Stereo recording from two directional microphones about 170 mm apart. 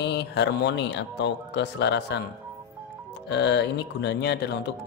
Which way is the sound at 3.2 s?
90° left.